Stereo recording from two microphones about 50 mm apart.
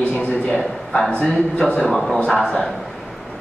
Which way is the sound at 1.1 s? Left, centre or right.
Left.